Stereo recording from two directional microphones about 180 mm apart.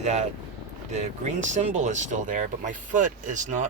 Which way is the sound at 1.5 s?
40° right (ahead or behind).